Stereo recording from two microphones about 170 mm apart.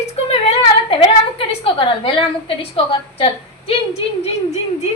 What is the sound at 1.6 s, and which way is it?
A woman's voice, 30° left (ahead or behind).